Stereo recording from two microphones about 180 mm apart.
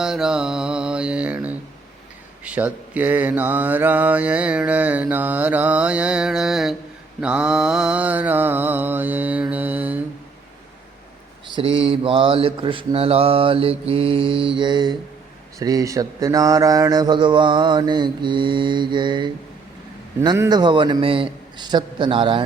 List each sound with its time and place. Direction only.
0.0 s mantra: 5° right (ahead or behind)
11.5 s mantra: 30° right (ahead or behind)